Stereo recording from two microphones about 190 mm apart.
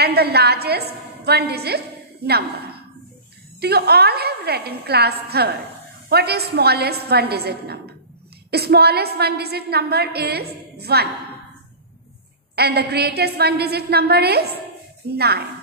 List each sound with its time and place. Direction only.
0.0 s a woman's voice: 55° right (ahead or behind)
12.5 s a woman's voice: 60° right (ahead or behind)